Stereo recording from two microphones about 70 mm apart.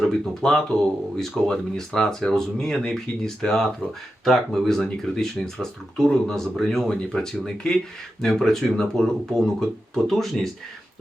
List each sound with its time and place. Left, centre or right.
0.0 s speech: centre